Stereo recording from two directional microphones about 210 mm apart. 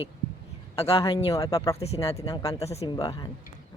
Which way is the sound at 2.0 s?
15° left (ahead or behind).